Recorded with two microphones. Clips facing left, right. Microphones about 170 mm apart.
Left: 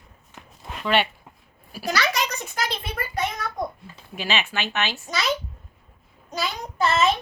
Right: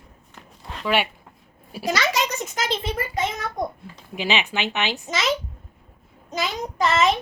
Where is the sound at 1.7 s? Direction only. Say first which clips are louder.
Right 2 dB; 20° right (ahead or behind).